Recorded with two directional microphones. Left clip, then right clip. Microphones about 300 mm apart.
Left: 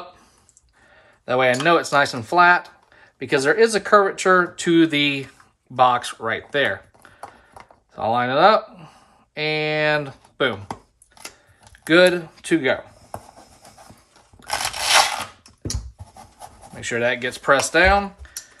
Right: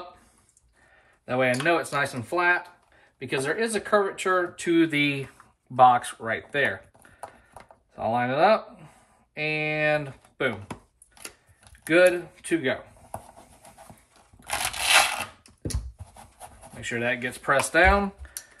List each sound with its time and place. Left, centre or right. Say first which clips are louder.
1.2 s speech: left 6 dB; centre
7.5 s a sound: left 5 dB; centre
9.3 s speech: left 5 dB; centre
11.8 s speech: left 4 dB; centre
14.6 s crushing: left 3 dB; centre
16.8 s speech: left 6 dB; centre